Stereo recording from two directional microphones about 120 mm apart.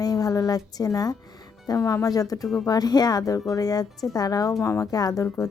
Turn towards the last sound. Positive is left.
turn(degrees=25)  # may be behind; listen again after turning